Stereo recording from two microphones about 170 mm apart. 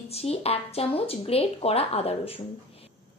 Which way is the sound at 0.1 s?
35° left (ahead or behind).